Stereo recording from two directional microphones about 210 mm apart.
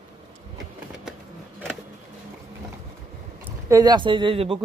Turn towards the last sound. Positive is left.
turn(degrees=-25)  # may be behind; listen again after turning